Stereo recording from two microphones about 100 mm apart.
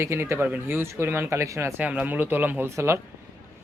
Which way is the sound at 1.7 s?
15° right (ahead or behind).